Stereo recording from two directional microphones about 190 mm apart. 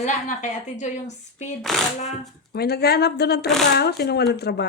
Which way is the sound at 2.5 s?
55° left (ahead or behind).